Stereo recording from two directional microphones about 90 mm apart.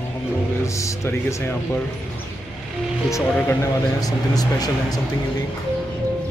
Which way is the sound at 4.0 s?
45° left (ahead or behind).